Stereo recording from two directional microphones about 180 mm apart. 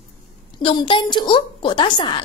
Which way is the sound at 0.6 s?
30° left (ahead or behind).